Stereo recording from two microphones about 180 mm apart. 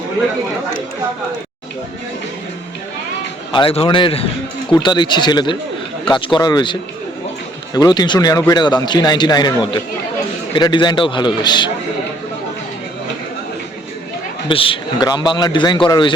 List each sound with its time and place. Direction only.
3.5 s speech: 30° left (ahead or behind)
14.4 s speech: 30° left (ahead or behind)